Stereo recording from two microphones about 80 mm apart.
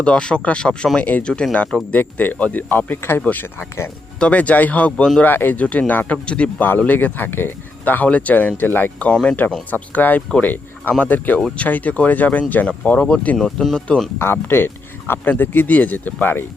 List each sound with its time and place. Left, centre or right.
0.0 s speech: centre; by 3.9 s left
4.2 s speech: centre
13.3 s speech: centre
14.2 s speech: left